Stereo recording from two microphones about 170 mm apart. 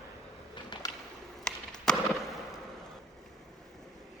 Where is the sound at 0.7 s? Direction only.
25° left (ahead or behind).